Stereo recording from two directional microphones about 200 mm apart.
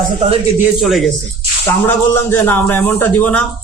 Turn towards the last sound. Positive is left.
turn(degrees=10)  # may be behind; listen again after turning